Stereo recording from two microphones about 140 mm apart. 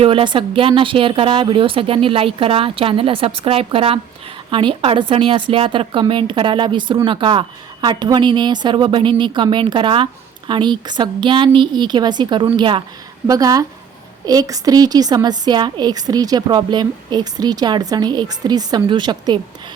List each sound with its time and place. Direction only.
0.0 s a woman's voice: 40° right (ahead or behind)
13.2 s a woman's voice: 25° right (ahead or behind)